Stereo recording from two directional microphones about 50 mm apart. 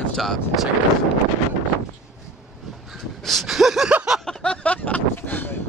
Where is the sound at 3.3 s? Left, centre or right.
Centre.